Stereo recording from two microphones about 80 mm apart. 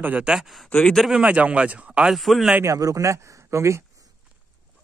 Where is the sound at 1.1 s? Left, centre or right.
Centre.